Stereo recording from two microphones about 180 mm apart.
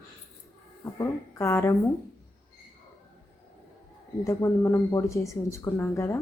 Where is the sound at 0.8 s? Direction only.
15° left (ahead or behind).